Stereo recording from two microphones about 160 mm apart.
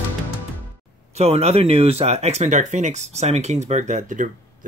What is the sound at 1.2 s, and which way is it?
Speech, 40° right (ahead or behind).